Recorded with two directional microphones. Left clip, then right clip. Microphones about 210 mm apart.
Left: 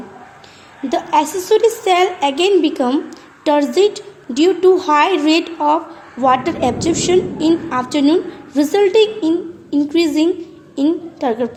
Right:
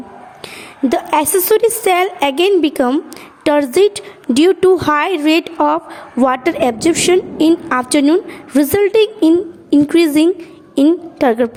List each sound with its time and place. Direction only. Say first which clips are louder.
0.9 s a woman's voice: right 1 dB; 45° right (ahead or behind)